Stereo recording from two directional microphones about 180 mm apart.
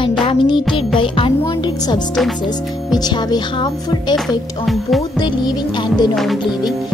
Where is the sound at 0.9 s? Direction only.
30° left (ahead or behind).